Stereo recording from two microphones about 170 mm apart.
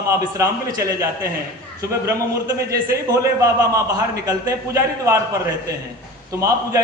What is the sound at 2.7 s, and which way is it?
A man's voice, 20° right (ahead or behind).